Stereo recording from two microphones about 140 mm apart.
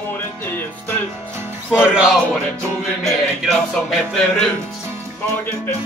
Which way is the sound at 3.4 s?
Centre (ahead or behind).